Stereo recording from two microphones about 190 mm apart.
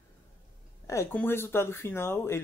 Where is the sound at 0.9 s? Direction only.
10° left (ahead or behind).